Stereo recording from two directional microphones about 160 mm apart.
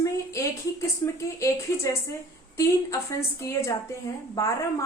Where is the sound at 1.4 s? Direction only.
20° left (ahead or behind).